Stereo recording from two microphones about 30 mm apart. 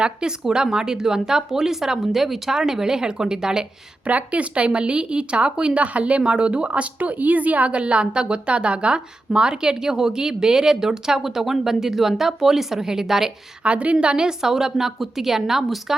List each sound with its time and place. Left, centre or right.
0.0 s speech: right; by 2.6 s centre
2.6 s speech: right
4.0 s speech: right
5.8 s speech: right
7.0 s a woman's voice: right
7.7 s speech: right; by 13.3 s centre
13.7 s a woman's voice: right
13.9 s speech: right
14.3 s speech: centre